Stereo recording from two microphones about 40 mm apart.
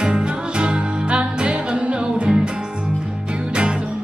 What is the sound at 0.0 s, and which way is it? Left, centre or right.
Music, right.